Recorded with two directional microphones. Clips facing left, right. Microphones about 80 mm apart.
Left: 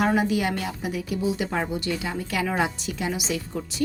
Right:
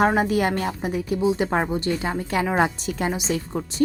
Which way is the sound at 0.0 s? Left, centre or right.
Right.